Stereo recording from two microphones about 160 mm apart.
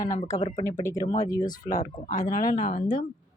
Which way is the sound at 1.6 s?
50° left (ahead or behind).